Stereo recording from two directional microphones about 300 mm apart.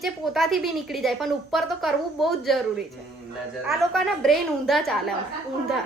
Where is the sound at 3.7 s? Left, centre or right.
Centre.